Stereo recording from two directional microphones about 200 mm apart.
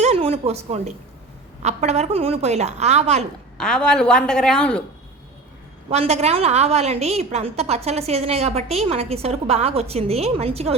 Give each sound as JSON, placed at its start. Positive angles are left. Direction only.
{"t": 0.0, "sound": "a sound", "side_deg": -30}
{"t": 1.6, "sound": "a woman's voice", "side_deg": -35}
{"t": 3.6, "sound": "a woman's voice", "side_deg": 5}
{"t": 5.9, "sound": "a woman's voice", "side_deg": -30}